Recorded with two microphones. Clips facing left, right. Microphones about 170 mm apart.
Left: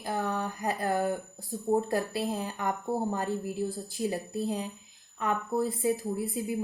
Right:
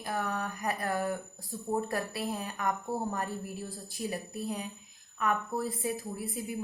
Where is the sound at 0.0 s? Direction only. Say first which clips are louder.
Left 3 dB; 25° left (ahead or behind).